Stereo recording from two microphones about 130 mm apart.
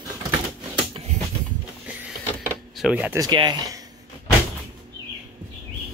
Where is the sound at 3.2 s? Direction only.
35° right (ahead or behind).